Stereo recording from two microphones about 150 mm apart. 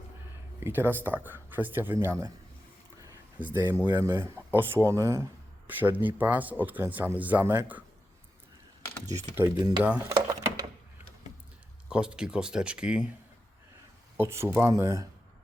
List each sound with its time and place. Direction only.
0.6 s speech: 15° right (ahead or behind)
3.4 s speech: 15° right (ahead or behind)
9.0 s speech: 20° right (ahead or behind)
11.9 s speech: 5° right (ahead or behind)
14.2 s speech: 15° right (ahead or behind)